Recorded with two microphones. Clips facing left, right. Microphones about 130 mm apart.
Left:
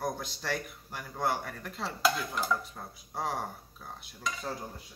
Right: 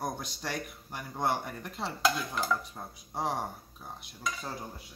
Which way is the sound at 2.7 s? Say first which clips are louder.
Right 1 dB; 15° right (ahead or behind).